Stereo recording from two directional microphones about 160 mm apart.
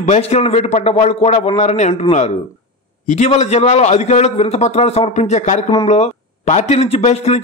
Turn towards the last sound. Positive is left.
turn(degrees=45)  # may be behind; listen again after turning